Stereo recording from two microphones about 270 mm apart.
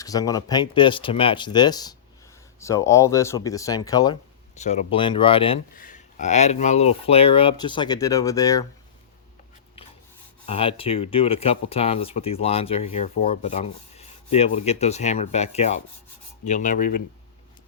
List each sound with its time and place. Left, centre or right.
0.0 s speech: centre
4.5 s speech: left
10.4 s speech: left